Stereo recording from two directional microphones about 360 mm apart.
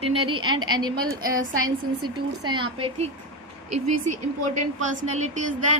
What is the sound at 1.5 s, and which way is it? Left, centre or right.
Speech, right.